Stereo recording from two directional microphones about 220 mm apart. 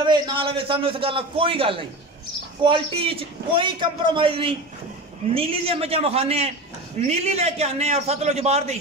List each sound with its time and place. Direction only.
0.0 s a man's voice: 20° right (ahead or behind)